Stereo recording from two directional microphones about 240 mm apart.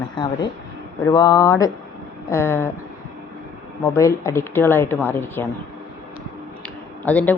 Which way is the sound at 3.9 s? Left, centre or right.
Centre.